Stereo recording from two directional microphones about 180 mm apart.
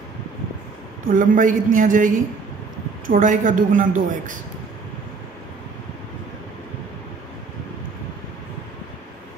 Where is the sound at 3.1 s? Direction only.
50° right (ahead or behind).